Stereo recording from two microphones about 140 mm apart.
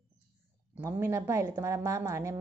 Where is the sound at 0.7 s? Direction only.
15° right (ahead or behind).